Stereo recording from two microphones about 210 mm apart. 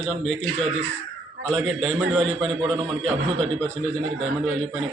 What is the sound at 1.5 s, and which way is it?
A man's voice, centre (ahead or behind).